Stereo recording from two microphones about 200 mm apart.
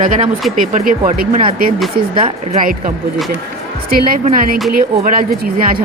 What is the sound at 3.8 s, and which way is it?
Speech, 50° right (ahead or behind).